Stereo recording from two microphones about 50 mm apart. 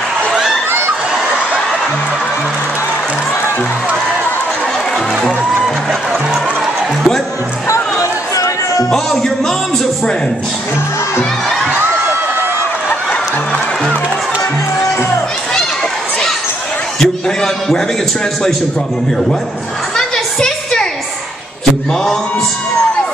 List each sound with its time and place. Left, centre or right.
7.6 s music: left
8.9 s a man's voice: centre
17.0 s a man's voice: centre
20.0 s a sound: centre